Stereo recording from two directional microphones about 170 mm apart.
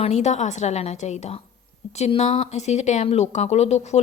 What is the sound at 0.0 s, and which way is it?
A woman's voice, 40° left (ahead or behind).